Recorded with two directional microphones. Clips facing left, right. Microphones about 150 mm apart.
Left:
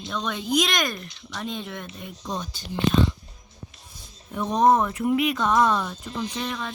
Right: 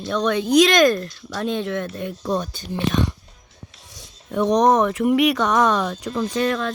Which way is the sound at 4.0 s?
80° right.